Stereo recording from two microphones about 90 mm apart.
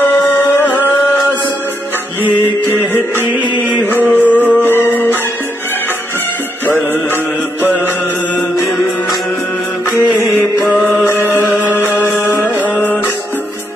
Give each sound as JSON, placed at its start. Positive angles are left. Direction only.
{"t": 0.0, "sound": "music", "side_deg": 25}
{"t": 4.1, "sound": "music", "side_deg": 20}
{"t": 7.6, "sound": "music", "side_deg": 25}
{"t": 12.3, "sound": "music", "side_deg": 25}